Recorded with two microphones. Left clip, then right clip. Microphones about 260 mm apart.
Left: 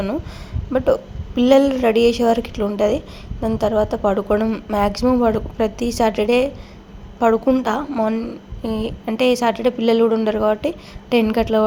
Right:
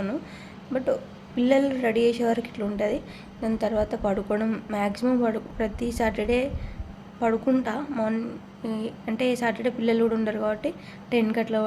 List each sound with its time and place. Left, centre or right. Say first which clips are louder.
1.4 s a woman's voice: left 8 dB; centre